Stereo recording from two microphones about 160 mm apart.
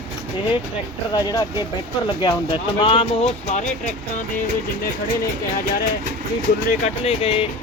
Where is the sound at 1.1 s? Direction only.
25° left (ahead or behind); by 3.6 s 45° left (ahead or behind).